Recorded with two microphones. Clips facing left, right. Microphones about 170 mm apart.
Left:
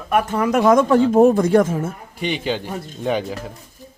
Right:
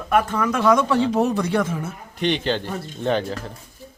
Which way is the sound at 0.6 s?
45° left (ahead or behind).